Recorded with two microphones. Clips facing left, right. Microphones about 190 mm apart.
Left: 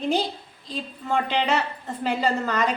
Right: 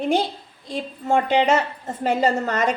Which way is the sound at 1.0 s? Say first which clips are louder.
Right 6 dB; 45° right (ahead or behind).